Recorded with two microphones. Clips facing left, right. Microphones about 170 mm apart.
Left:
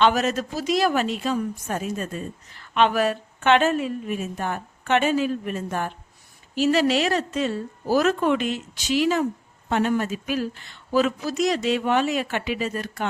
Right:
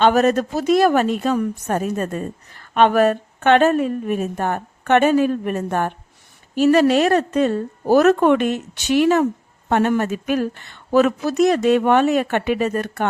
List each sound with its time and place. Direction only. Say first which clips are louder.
0.0 s a woman's voice: right 5 dB; 55° right (ahead or behind)